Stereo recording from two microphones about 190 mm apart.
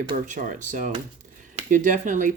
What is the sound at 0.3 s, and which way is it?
Speech, 40° right (ahead or behind).